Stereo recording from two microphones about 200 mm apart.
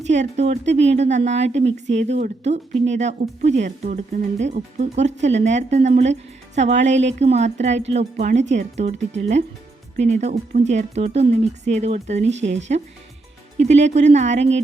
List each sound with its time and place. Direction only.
0.1 s speech: 35° right (ahead or behind)